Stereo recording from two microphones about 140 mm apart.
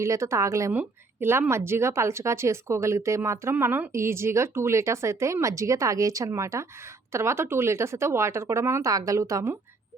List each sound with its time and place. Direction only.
0.0 s a woman's voice: 20° right (ahead or behind)